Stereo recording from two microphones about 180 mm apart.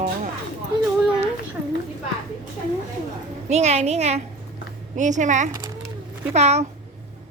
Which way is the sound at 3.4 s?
40° right (ahead or behind).